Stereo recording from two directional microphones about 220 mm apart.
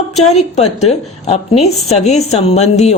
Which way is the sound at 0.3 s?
30° left (ahead or behind).